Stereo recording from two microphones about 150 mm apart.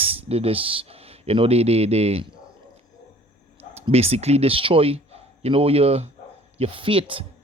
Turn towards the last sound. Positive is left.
turn(degrees=-35)  # may be behind; listen again after turning